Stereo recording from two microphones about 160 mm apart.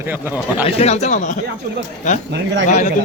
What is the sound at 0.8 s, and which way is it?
Speech, 45° left (ahead or behind).